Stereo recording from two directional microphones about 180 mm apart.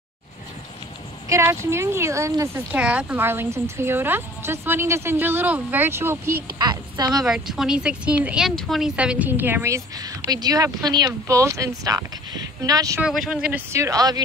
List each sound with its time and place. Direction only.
1.3 s speech: 15° right (ahead or behind)
6.6 s a woman's voice: 25° right (ahead or behind)
7.2 s speech: centre (ahead or behind); by 13.0 s 20° right (ahead or behind)
13.0 s speech: 5° right (ahead or behind); by 14.2 s 20° right (ahead or behind)